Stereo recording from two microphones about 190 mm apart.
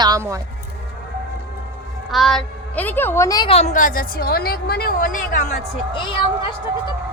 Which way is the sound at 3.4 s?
35° left (ahead or behind).